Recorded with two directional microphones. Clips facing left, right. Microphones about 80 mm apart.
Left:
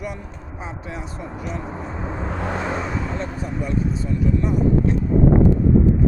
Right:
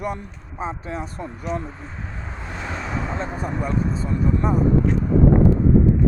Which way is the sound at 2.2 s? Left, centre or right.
Left.